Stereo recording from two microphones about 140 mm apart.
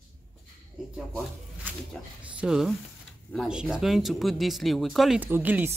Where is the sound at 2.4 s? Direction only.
5° right (ahead or behind).